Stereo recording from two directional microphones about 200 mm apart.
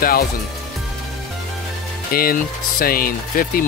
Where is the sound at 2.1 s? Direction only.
45° left (ahead or behind).